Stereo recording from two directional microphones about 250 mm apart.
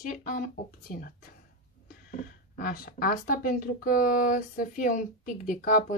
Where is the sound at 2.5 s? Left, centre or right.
Left.